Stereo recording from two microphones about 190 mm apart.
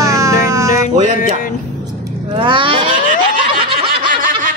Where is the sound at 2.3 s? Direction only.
25° right (ahead or behind).